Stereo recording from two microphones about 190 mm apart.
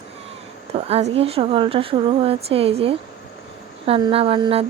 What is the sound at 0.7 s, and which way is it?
Speech, 35° right (ahead or behind).